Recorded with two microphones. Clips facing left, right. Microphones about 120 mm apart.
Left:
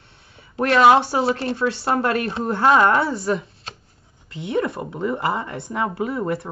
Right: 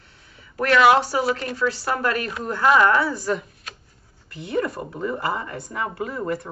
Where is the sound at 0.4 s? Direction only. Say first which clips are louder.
Left 2 dB; 30° left (ahead or behind).